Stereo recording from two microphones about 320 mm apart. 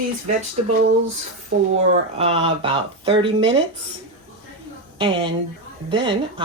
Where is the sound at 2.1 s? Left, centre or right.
Centre.